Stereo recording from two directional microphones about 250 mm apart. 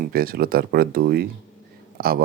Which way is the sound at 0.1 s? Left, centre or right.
Right.